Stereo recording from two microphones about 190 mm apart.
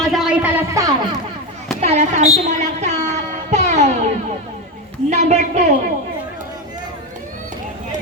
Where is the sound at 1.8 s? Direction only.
35° right (ahead or behind).